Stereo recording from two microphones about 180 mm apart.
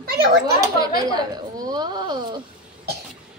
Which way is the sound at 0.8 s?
20° right (ahead or behind).